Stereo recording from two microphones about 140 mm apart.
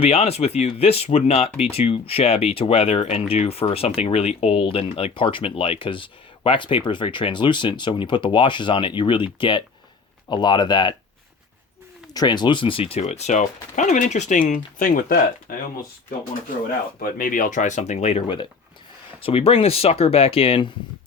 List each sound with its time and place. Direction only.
0.0 s speech: 50° left (ahead or behind); by 10.9 s 30° left (ahead or behind)
12.1 s speech: 30° left (ahead or behind); by 15.5 s 85° left
17.0 s speech: 85° left; by 20.7 s 40° left (ahead or behind)